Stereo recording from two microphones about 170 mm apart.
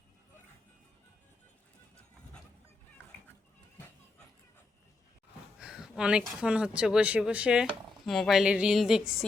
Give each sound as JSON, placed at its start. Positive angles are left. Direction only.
{"t": 5.5, "sound": "speech", "side_deg": -5}